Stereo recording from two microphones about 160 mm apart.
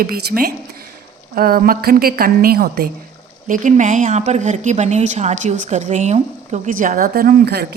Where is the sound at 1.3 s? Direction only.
65° right (ahead or behind).